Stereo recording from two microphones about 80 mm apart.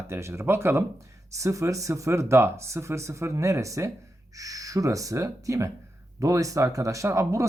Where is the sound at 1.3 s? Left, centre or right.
Right.